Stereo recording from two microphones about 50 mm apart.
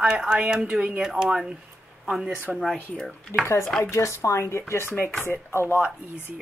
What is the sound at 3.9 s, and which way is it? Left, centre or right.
Speech, left.